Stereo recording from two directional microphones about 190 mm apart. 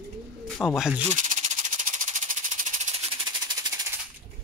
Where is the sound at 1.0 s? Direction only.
40° right (ahead or behind).